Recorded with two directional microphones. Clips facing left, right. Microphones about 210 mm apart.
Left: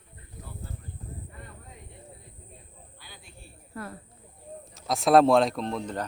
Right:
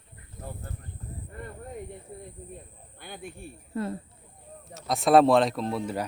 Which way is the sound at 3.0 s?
55° right (ahead or behind).